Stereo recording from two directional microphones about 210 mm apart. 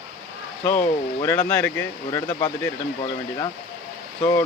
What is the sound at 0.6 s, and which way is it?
Speech, 10° left (ahead or behind).